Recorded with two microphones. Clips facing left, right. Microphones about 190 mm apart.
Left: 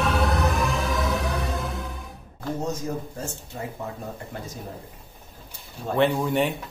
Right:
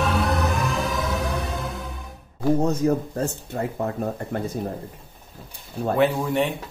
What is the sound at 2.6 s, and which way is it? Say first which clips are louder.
Speech: right 8 dB; 60° right (ahead or behind).